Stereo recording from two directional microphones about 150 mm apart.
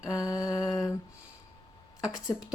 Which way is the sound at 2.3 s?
25° left (ahead or behind).